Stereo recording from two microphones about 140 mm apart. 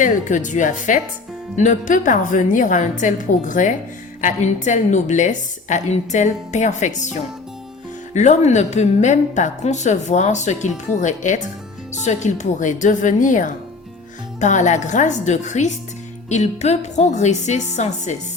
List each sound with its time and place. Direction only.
0.0 s a woman's voice: 65° left (ahead or behind)